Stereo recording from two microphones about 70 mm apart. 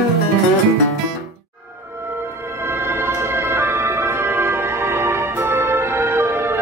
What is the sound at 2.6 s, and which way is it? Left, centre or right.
Music, right.